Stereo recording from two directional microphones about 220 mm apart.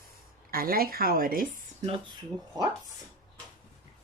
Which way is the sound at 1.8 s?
25° right (ahead or behind).